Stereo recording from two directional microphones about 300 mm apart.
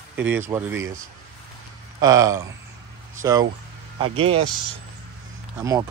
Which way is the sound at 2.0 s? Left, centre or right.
Centre.